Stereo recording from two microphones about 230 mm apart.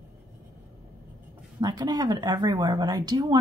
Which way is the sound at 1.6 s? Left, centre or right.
Centre.